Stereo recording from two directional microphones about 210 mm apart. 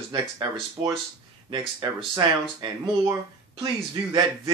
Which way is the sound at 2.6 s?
20° right (ahead or behind).